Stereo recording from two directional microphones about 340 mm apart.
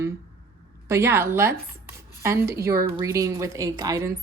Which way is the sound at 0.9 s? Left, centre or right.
Centre.